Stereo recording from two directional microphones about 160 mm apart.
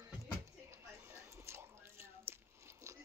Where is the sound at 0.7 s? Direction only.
15° right (ahead or behind).